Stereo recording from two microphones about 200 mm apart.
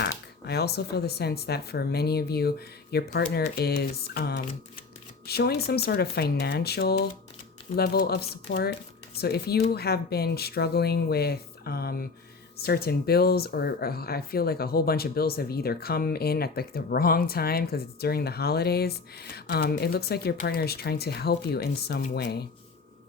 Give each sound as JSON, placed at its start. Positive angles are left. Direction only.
{"t": 0.0, "sound": "speech", "side_deg": 55}